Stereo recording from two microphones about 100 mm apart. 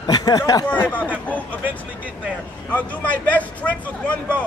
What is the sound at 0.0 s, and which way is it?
Speech, 40° left (ahead or behind).